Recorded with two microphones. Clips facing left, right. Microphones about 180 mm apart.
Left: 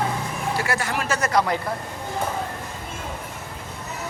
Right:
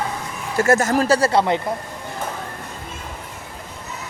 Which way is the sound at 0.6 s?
45° right (ahead or behind).